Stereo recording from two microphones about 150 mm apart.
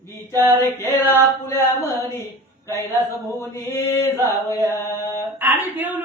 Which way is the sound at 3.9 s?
15° left (ahead or behind).